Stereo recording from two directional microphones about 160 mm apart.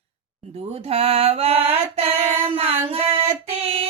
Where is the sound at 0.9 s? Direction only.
40° right (ahead or behind).